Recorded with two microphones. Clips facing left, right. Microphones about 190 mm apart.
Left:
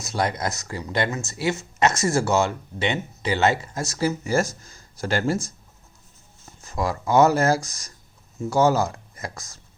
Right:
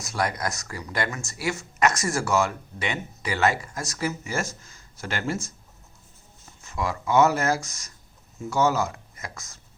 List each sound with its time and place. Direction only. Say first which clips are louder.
0.0 s speech: left 2 dB; 25° left (ahead or behind)
6.6 s speech: left 3 dB; 35° left (ahead or behind)